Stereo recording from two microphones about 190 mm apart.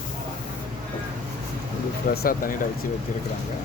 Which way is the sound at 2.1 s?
50° left (ahead or behind).